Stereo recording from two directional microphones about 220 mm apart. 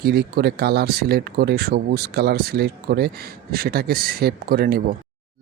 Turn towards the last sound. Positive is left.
turn(degrees=-45)  # may be behind; listen again after turning